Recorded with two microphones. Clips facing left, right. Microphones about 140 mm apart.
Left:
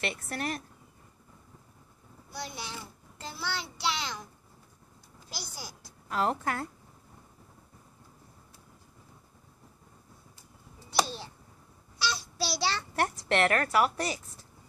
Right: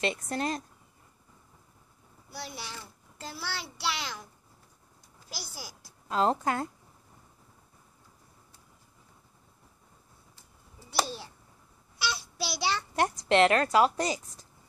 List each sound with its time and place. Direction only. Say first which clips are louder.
0.0 s a child's voice: right 4 dB; 20° right (ahead or behind)
2.3 s a child's voice: left 1 dB; 5° right (ahead or behind)
5.3 s a child's voice: even; 5° right (ahead or behind)
6.0 s a child's voice: right 3 dB; 25° right (ahead or behind)
10.9 s babbling: left 1 dB; 10° right (ahead or behind)
12.1 s a child's voice: left 2 dB; 20° right (ahead or behind)